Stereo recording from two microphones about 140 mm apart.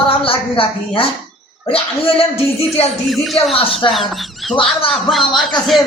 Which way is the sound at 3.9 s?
Centre (ahead or behind).